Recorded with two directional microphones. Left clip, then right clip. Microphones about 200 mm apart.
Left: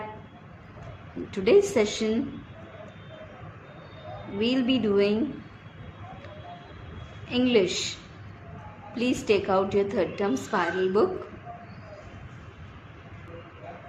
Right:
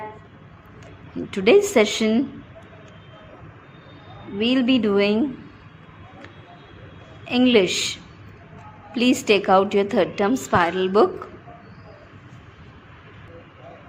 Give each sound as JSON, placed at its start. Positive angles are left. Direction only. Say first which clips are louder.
{"t": 1.3, "sound": "a woman's voice", "louder": "right 5 dB", "side_deg": -35}
{"t": 4.4, "sound": "a woman's voice", "louder": "right 5 dB", "side_deg": -30}
{"t": 7.3, "sound": "a woman's voice", "louder": "right 6 dB", "side_deg": -35}
{"t": 9.0, "sound": "a woman's voice", "louder": "right 6 dB", "side_deg": -35}